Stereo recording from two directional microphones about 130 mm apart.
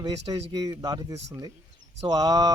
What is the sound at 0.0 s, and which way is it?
Speech, 30° right (ahead or behind).